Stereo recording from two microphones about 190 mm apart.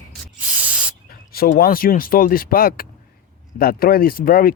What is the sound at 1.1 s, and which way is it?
Speech, 55° left (ahead or behind).